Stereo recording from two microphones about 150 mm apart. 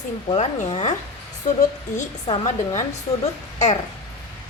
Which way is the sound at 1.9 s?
50° left (ahead or behind).